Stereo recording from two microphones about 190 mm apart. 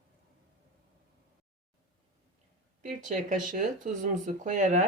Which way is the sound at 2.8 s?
40° right (ahead or behind).